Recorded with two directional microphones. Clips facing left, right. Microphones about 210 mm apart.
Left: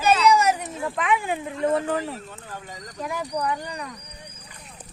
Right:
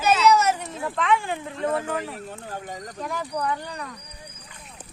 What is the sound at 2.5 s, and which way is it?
Speech, 50° right (ahead or behind).